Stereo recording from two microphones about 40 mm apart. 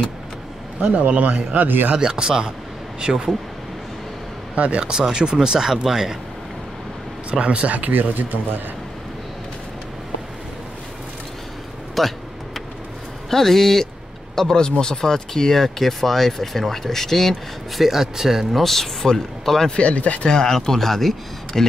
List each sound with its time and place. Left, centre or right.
0.7 s speech: right
2.0 s speech: centre
4.6 s speech: right; by 6.1 s centre
7.2 s a man's voice: right
12.0 s speech: centre
13.3 s speech: centre
17.8 s speech: centre
19.7 s speech: left
20.2 s speech: centre